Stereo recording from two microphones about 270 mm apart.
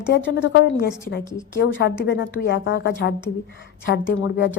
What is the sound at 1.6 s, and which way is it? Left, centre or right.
A woman's voice, left.